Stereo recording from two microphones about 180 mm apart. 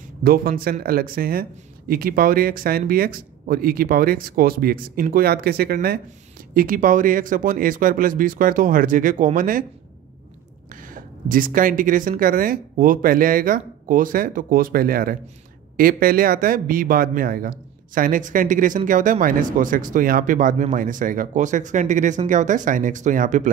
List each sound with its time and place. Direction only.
0.2 s speech: 55° right (ahead or behind)
10.7 s speech: 50° right (ahead or behind)